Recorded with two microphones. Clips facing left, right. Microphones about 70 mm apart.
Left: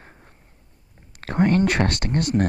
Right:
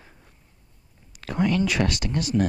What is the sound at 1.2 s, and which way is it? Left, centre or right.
Speech, left.